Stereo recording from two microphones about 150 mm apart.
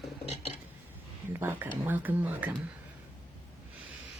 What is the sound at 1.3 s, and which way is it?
Speech, 15° right (ahead or behind).